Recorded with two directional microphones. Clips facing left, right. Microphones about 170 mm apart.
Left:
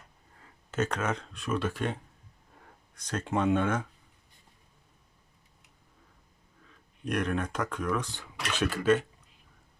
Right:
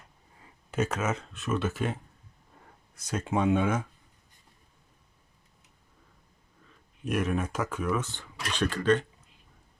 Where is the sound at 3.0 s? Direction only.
10° right (ahead or behind).